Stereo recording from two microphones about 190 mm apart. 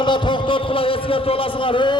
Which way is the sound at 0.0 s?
25° left (ahead or behind).